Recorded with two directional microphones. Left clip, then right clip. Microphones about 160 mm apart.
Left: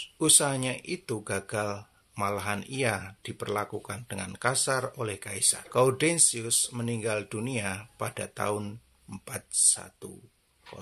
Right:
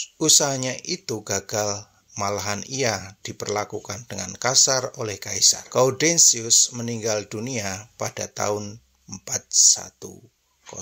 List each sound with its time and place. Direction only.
0.0 s speech: 20° right (ahead or behind)